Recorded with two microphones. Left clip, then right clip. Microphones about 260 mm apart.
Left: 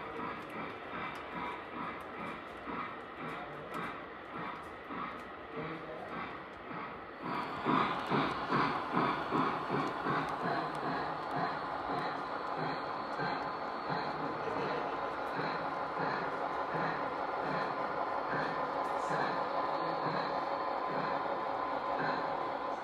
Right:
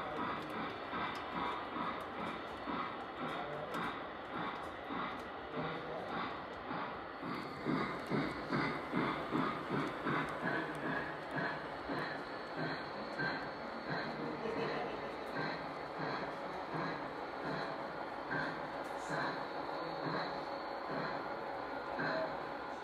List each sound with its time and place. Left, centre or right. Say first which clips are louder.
7.7 s vehicle: left 7 dB; centre
8.6 s shuffle: left 5 dB; centre
9.8 s train: left 4 dB; centre
11.4 s vehicle: left 5 dB; centre
13.8 s train: left 3 dB; centre
15.3 s a sound: left 5 dB; centre
16.7 s music: left 3 dB; centre
18.3 s train: left 5 dB; centre